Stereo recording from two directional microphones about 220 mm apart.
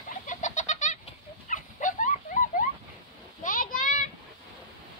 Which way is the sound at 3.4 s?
35° left (ahead or behind).